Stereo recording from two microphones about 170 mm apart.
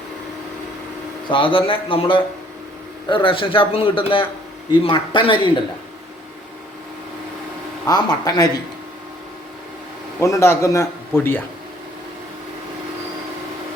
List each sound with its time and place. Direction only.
1.3 s a man's voice: 30° left (ahead or behind)
7.9 s a man's voice: 20° left (ahead or behind)
10.2 s a man's voice: 15° left (ahead or behind)